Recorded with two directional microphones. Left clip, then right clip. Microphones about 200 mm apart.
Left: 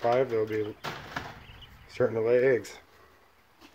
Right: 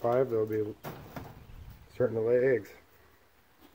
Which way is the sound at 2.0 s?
5° left (ahead or behind).